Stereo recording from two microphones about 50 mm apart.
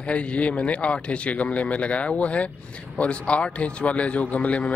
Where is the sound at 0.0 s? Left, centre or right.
Left.